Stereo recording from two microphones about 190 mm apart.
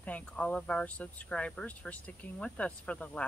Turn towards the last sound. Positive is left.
turn(degrees=5)  # may be behind; listen again after turning